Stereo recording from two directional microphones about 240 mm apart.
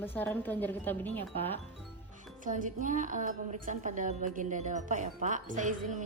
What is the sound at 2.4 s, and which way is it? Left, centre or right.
A woman's voice, right.